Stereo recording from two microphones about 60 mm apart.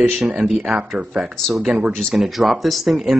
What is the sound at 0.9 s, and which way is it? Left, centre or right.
Speech, centre.